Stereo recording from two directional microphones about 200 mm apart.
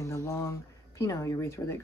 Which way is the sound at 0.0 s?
15° left (ahead or behind).